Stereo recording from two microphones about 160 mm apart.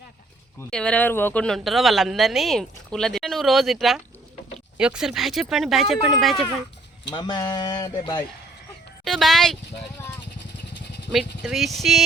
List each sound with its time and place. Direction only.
0.7 s a woman's voice: 5° left (ahead or behind)
7.1 s speech: 25° left (ahead or behind)
9.0 s speech: centre (ahead or behind)
11.1 s a woman's voice: centre (ahead or behind)